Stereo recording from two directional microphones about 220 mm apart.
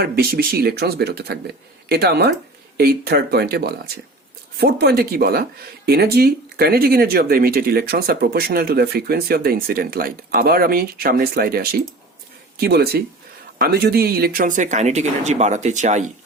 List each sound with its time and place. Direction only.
0.0 s speech: 45° right (ahead or behind)